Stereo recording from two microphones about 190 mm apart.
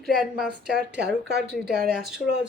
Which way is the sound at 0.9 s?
60° right (ahead or behind).